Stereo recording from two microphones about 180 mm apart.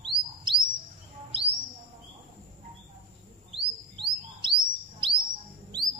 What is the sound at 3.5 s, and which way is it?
Bird, 30° right (ahead or behind).